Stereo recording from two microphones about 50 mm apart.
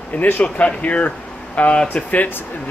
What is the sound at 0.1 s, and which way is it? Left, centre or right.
Speech, left.